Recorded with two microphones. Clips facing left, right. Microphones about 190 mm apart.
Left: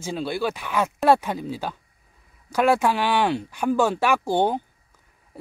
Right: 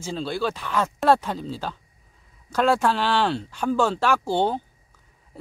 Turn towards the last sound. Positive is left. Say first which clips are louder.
# left 1 dB
turn(degrees=15)  # may be behind; listen again after turning